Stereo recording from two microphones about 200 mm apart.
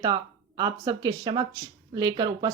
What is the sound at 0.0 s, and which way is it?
Speech, 20° right (ahead or behind).